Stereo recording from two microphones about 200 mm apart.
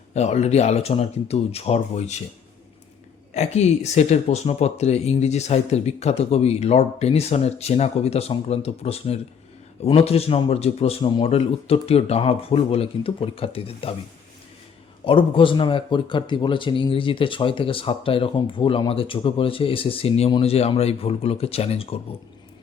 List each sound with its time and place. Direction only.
0.1 s speech: 35° left (ahead or behind)
3.3 s speech: 35° left (ahead or behind)
15.0 s speech: 25° left (ahead or behind)